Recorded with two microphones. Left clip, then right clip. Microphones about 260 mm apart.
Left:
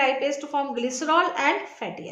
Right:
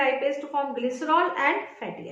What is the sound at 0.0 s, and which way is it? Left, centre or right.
A woman's voice, left.